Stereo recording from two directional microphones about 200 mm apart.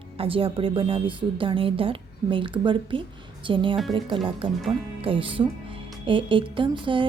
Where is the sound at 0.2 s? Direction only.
25° right (ahead or behind).